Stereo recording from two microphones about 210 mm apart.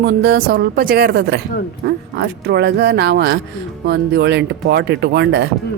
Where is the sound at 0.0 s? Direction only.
55° right (ahead or behind).